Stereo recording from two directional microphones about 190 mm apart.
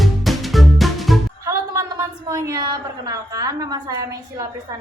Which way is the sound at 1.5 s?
15° right (ahead or behind).